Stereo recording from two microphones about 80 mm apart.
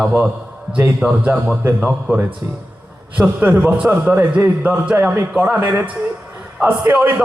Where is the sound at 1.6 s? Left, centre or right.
Right.